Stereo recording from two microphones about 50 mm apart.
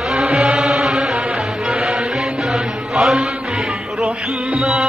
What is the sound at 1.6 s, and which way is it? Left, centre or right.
Music, centre.